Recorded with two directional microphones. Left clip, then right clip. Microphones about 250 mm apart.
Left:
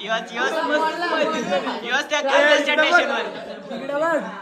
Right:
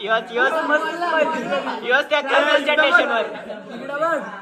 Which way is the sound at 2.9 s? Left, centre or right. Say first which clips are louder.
Right 1 dB; left.